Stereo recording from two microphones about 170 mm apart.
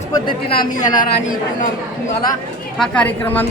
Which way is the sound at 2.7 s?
5° left (ahead or behind).